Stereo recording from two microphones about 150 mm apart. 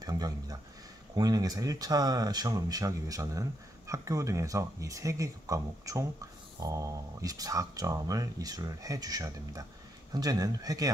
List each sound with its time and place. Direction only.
0.0 s speech: 25° right (ahead or behind)